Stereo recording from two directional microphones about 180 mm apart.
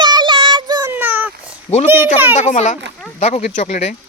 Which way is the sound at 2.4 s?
40° left (ahead or behind).